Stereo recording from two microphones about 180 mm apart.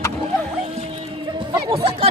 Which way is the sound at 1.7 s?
30° right (ahead or behind).